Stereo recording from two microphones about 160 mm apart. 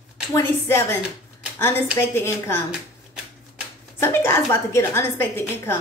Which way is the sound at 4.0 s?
15° left (ahead or behind).